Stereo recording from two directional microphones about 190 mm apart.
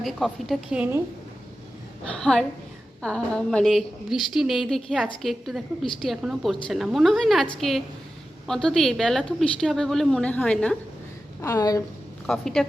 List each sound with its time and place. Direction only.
0.0 s a woman's voice: centre (ahead or behind)
2.1 s a woman's voice: 5° left (ahead or behind)
11.3 s a woman's voice: 15° left (ahead or behind)
12.2 s a woman's voice: centre (ahead or behind)